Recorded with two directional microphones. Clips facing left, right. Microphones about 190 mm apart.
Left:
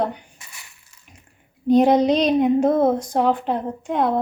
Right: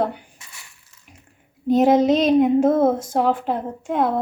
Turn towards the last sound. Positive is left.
turn(degrees=-5)  # may be behind; listen again after turning